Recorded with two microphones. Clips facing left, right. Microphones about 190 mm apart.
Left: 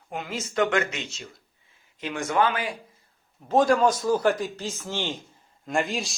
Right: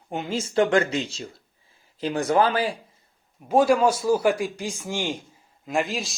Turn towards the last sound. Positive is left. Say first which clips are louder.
# right 1 dB
turn(degrees=0)  # may be behind; listen again after turning